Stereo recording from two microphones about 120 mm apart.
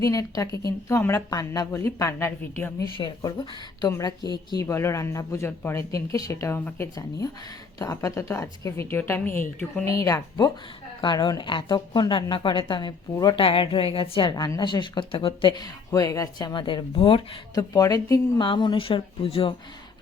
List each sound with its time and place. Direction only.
0.0 s a woman's voice: 30° left (ahead or behind)
3.0 s a woman's voice: 35° left (ahead or behind)
7.8 s a woman's voice: 25° left (ahead or behind)
13.3 s a woman's voice: 50° left (ahead or behind)
17.5 s speech: 30° left (ahead or behind); by 19.5 s 50° left (ahead or behind)